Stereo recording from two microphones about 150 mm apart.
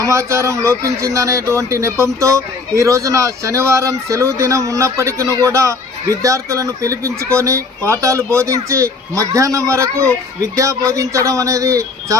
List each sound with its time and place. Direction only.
0.0 s speech: 20° right (ahead or behind)